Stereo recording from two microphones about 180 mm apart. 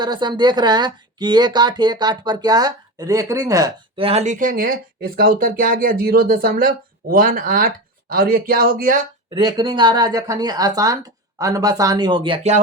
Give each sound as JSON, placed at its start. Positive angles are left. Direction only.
{"t": 0.0, "sound": "speech", "side_deg": -25}
{"t": 3.9, "sound": "speech", "side_deg": -35}
{"t": 9.3, "sound": "speech", "side_deg": -25}